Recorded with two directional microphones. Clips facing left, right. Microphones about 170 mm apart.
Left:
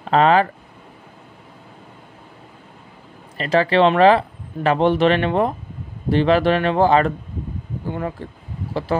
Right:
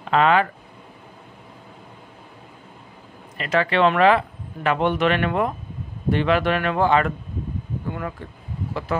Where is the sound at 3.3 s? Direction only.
35° left (ahead or behind).